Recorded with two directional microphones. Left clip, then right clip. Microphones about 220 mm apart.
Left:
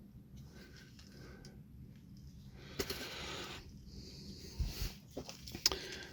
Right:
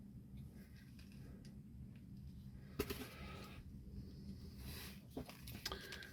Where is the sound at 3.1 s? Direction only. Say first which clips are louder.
Left 11 dB; 45° left (ahead or behind).